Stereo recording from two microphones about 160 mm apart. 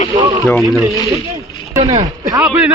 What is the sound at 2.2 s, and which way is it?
Speech, 20° right (ahead or behind).